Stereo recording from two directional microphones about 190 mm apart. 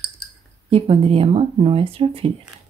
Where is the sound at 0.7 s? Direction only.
30° right (ahead or behind).